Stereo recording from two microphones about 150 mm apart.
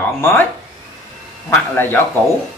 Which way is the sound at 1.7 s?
15° left (ahead or behind).